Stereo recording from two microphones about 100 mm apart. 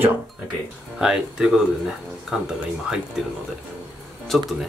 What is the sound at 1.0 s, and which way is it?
Speech, 5° right (ahead or behind).